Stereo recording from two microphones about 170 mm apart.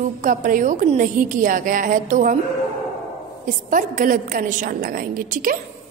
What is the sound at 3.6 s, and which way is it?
A woman's voice, 50° right (ahead or behind).